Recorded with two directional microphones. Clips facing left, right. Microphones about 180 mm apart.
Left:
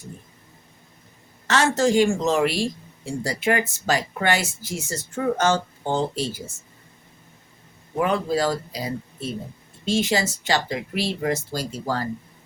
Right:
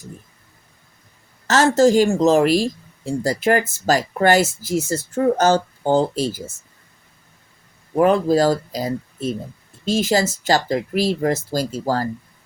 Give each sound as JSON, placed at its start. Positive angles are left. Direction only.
{"t": 1.5, "sound": "speech", "side_deg": -40}
{"t": 7.9, "sound": "speech", "side_deg": -40}